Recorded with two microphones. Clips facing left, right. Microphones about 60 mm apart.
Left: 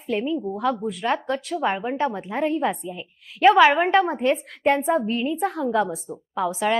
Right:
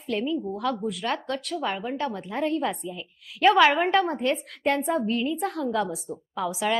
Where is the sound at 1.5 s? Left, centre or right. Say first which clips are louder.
Left 6 dB; left.